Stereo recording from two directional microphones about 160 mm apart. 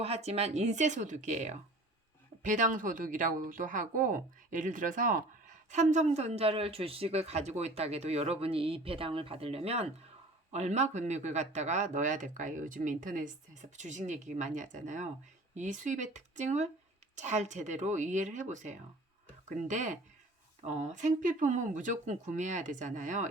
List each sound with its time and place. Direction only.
0.0 s speech: 40° right (ahead or behind)